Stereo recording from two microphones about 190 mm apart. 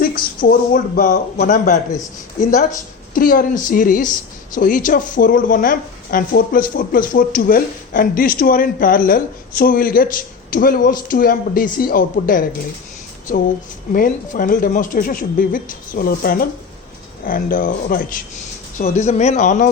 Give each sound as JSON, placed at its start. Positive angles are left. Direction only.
{"t": 0.0, "sound": "speech", "side_deg": 50}
{"t": 13.9, "sound": "speech", "side_deg": 45}
{"t": 18.8, "sound": "speech", "side_deg": 35}